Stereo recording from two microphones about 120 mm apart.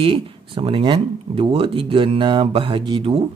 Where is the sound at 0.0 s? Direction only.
50° right (ahead or behind).